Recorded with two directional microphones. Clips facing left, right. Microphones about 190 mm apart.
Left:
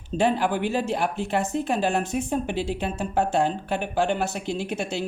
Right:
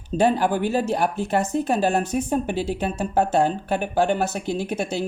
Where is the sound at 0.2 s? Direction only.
40° right (ahead or behind).